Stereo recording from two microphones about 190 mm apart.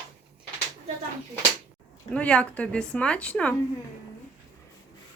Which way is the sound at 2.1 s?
5° left (ahead or behind).